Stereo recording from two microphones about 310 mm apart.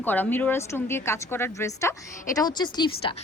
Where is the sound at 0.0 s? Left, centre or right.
Centre.